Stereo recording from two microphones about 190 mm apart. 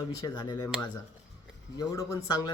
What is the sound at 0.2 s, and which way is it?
Speech, 25° left (ahead or behind).